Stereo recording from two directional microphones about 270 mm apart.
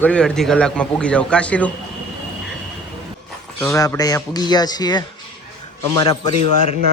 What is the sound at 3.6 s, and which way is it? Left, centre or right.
Speech, centre.